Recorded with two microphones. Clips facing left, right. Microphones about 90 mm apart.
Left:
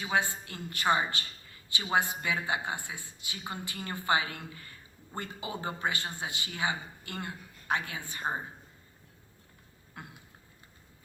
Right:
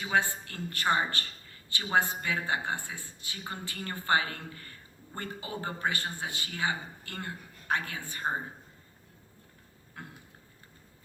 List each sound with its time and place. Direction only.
0.1 s a woman's voice: 20° left (ahead or behind)